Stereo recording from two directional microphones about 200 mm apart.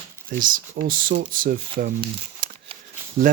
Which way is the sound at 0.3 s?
45° right (ahead or behind).